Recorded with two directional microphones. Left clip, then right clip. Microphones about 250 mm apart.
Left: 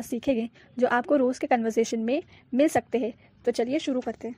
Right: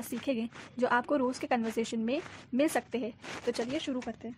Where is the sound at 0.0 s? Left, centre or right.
Centre.